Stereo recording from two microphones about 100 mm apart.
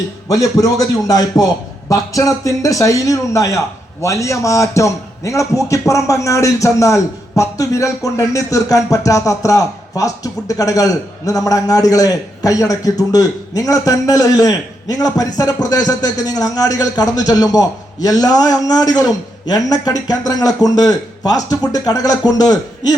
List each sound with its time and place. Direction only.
0.3 s a man's voice: 35° left (ahead or behind)